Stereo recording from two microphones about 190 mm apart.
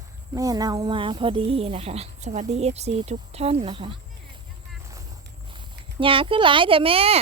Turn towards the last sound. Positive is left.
turn(degrees=-30)  # may be behind; listen again after turning